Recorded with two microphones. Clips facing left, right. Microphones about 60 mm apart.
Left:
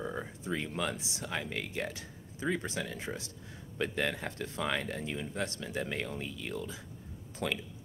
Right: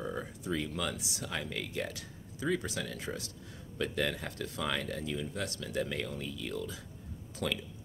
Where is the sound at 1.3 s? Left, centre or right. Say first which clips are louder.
Left 2 dB; centre.